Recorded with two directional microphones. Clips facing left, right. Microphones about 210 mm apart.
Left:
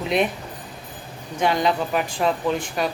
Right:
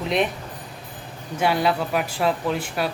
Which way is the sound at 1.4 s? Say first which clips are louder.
Even; 5° right (ahead or behind).